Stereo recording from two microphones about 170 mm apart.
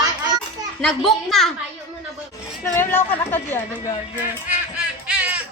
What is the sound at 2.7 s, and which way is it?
Speech, 15° left (ahead or behind).